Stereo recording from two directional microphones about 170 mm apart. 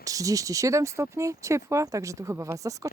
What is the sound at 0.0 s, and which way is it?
Speech, 20° right (ahead or behind).